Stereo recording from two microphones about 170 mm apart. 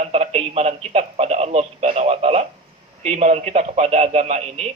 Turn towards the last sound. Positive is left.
turn(degrees=-40)  # may be behind; listen again after turning